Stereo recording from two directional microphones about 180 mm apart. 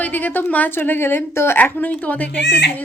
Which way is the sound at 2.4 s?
70° left (ahead or behind).